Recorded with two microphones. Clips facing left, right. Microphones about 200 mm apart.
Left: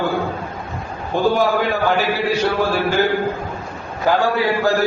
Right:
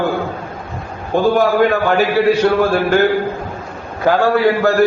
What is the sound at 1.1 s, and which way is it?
Speech, 55° right (ahead or behind).